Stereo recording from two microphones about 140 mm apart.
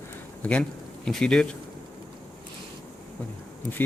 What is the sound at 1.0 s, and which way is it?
Speech, 5° left (ahead or behind).